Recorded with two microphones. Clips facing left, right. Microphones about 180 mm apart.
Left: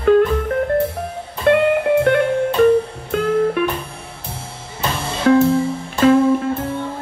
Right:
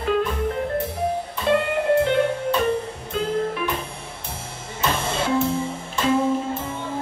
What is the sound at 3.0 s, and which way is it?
Music, 60° left (ahead or behind).